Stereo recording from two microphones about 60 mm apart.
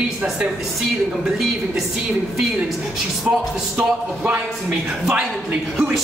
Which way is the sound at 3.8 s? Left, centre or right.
Centre.